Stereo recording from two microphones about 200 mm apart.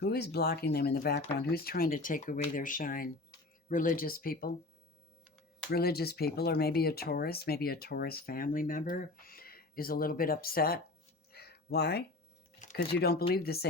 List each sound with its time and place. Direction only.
0.0 s speech: 55° left (ahead or behind)
5.7 s speech: 50° left (ahead or behind)
11.3 s a sound: 50° left (ahead or behind)
12.7 s speech: 55° left (ahead or behind)